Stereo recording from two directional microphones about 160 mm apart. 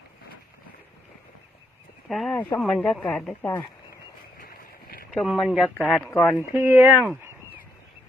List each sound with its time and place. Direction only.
2.0 s a woman's voice: centre (ahead or behind)
5.1 s a woman's voice: centre (ahead or behind)
6.1 s speech: 10° left (ahead or behind)
6.5 s speech: 10° right (ahead or behind)